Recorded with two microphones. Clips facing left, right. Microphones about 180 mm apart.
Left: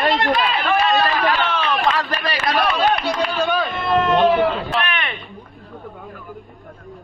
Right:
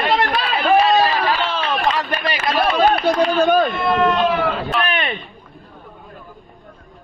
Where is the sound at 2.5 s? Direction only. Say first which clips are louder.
Right 1 dB; 25° right (ahead or behind).